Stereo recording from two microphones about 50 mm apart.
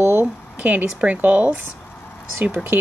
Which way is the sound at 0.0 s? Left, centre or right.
Right.